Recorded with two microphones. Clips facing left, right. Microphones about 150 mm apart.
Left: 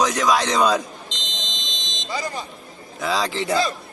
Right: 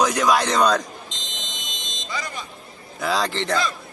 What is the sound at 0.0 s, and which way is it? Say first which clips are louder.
Speech: even; centre (ahead or behind).